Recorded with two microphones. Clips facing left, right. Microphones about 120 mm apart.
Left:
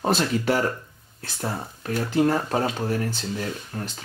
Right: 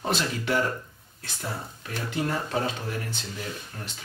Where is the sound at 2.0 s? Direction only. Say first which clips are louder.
Left 7 dB; 40° left (ahead or behind).